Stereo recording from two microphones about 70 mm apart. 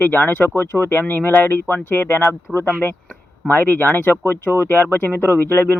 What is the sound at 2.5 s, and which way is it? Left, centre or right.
Speech, centre.